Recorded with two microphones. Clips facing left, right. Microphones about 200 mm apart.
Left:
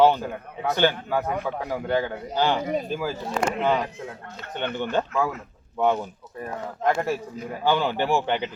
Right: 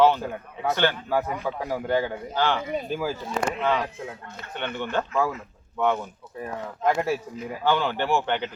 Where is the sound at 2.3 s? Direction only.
15° left (ahead or behind).